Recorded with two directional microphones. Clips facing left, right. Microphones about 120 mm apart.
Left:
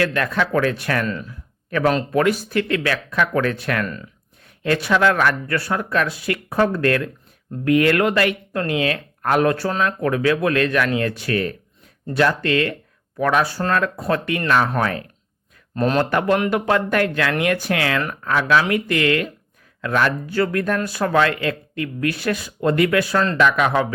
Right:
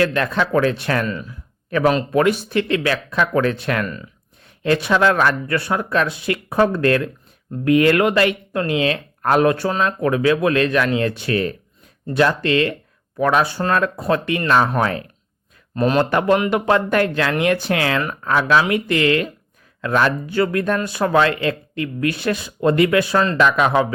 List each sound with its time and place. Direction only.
0.0 s speech: 25° right (ahead or behind)
1.0 s speech: 5° right (ahead or behind)
2.1 s speech: 20° right (ahead or behind)
15.7 s a man's voice: 5° right (ahead or behind)
16.0 s speech: 20° right (ahead or behind)